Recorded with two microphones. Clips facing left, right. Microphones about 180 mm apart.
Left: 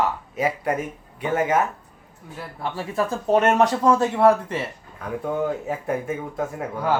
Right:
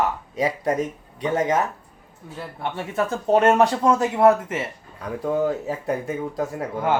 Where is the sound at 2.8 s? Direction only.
30° right (ahead or behind).